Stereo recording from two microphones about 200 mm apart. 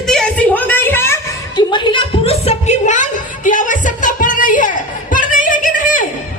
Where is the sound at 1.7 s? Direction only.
25° left (ahead or behind); by 6.0 s 40° left (ahead or behind).